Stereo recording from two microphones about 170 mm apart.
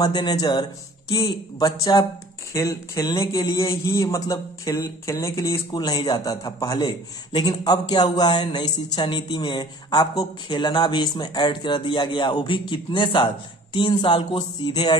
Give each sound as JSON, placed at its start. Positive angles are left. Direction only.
{"t": 0.0, "sound": "a man's voice", "side_deg": 25}